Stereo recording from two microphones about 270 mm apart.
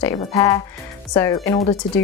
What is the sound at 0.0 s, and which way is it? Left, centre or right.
Speech, centre.